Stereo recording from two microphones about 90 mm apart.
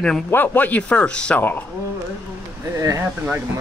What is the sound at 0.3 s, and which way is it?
Speech, 20° left (ahead or behind).